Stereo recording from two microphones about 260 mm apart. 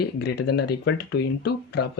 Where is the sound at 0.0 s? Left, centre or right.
Left.